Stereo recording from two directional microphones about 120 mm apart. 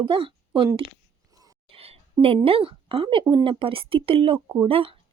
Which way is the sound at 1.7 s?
55° right (ahead or behind).